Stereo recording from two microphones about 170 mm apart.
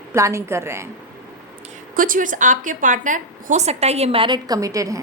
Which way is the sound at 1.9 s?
55° right (ahead or behind).